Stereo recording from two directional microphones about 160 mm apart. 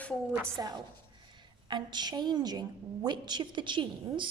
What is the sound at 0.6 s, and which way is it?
A woman's voice, 25° right (ahead or behind).